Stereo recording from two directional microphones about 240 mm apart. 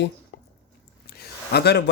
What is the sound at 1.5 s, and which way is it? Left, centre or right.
Speech, left.